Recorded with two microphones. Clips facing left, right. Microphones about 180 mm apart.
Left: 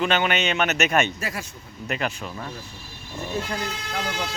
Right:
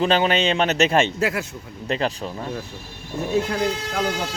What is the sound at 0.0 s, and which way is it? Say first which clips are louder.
A man's voice: right 4 dB; 35° right (ahead or behind).